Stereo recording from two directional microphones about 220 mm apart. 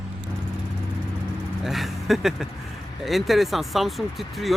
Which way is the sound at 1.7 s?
Centre (ahead or behind).